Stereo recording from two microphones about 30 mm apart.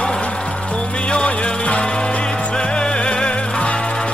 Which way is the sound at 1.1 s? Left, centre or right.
Left.